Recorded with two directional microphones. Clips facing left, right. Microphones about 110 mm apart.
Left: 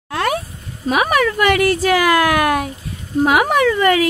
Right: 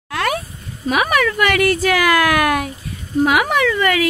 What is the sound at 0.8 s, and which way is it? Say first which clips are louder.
Speech: left 1 dB; 30° left (ahead or behind).